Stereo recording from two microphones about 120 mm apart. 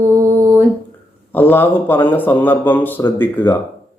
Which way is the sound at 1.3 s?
15° left (ahead or behind).